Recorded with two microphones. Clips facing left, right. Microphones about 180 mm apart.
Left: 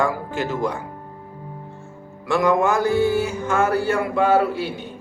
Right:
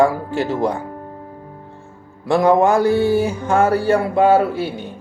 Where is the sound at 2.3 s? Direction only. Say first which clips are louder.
Right 5 dB; 35° right (ahead or behind).